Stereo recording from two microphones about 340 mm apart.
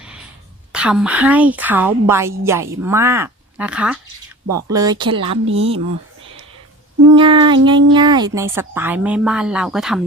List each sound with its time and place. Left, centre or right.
0.7 s a woman's voice: centre
7.1 s speech: centre